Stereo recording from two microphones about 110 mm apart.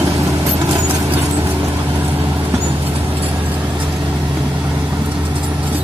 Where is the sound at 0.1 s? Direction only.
25° right (ahead or behind).